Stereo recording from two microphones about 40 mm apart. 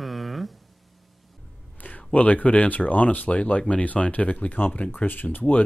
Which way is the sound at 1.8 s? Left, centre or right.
Left.